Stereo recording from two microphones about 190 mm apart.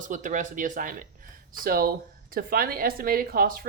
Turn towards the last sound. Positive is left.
turn(degrees=-50)  # may be behind; listen again after turning